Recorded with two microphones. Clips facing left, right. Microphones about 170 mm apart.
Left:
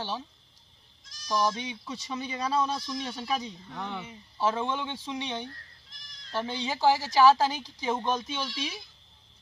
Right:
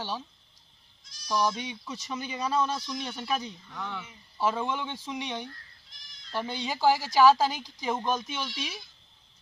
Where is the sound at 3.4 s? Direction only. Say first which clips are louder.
Left 1 dB; 30° left (ahead or behind).